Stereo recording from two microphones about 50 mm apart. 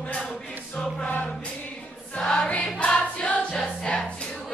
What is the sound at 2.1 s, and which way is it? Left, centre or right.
Choir, centre.